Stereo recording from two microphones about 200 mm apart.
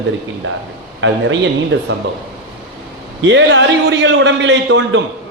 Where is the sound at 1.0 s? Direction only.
70° right (ahead or behind).